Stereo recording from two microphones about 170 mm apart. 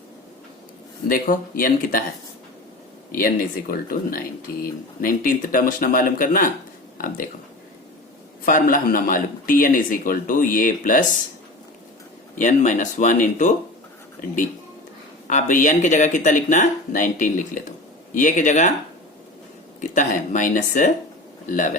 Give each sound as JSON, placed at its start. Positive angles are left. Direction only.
{"t": 1.1, "sound": "speech", "side_deg": 55}
{"t": 3.2, "sound": "speech", "side_deg": 60}
{"t": 8.4, "sound": "speech", "side_deg": 55}
{"t": 12.4, "sound": "speech", "side_deg": 45}
{"t": 15.3, "sound": "speech", "side_deg": 50}
{"t": 19.8, "sound": "speech", "side_deg": 45}